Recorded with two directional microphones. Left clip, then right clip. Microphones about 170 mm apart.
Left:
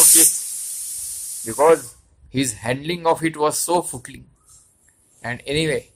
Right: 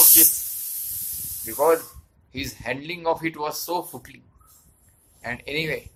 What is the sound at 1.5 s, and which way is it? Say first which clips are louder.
Speech: left 5 dB; 50° left (ahead or behind).